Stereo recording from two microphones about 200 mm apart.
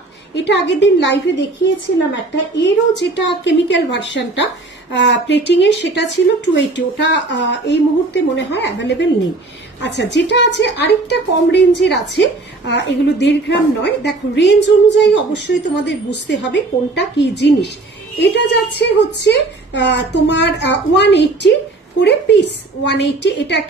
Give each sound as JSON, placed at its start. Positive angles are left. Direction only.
{"t": 0.4, "sound": "a woman's voice", "side_deg": 60}
{"t": 2.6, "sound": "a woman's voice", "side_deg": 65}